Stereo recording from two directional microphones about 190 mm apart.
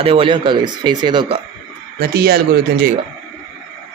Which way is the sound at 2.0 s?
55° right (ahead or behind).